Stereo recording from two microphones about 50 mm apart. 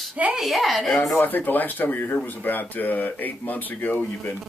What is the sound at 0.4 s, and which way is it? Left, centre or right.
Speech, centre.